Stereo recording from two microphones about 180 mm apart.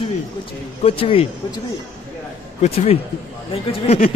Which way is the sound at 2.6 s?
35° left (ahead or behind).